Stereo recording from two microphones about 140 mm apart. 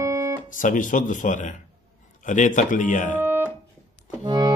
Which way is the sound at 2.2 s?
65° left (ahead or behind).